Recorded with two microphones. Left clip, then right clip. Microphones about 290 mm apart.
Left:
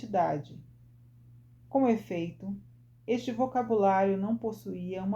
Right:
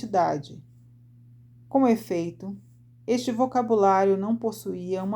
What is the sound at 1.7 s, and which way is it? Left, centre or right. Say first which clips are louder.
Speech: right 5 dB; right.